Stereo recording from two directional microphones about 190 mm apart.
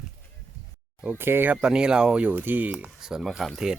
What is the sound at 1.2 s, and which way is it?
Speech, 10° right (ahead or behind).